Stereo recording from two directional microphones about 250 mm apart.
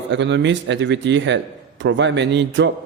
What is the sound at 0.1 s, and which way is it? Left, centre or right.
Speech, right.